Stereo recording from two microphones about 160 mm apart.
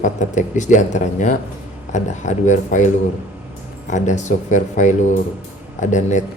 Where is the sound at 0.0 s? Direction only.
50° left (ahead or behind).